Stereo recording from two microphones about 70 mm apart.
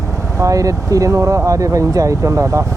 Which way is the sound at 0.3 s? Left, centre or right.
Right.